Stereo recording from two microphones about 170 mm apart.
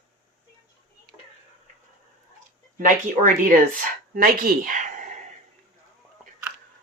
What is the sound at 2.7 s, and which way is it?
Speech, 50° right (ahead or behind).